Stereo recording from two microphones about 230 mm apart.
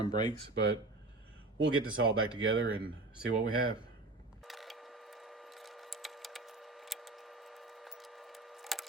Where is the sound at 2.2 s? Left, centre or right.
Right.